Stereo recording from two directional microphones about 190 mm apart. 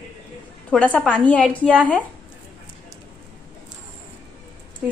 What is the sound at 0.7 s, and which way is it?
A woman's voice, 5° left (ahead or behind).